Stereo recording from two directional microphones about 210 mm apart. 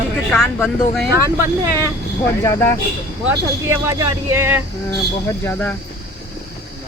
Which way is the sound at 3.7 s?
15° right (ahead or behind).